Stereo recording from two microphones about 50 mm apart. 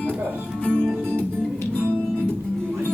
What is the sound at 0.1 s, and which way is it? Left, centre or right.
Music, right.